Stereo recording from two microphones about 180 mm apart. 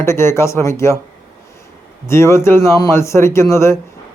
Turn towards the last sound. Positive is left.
turn(degrees=15)  # may be behind; listen again after turning